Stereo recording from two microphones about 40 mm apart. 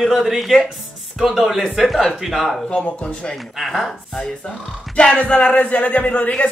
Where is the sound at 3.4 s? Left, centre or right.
Centre.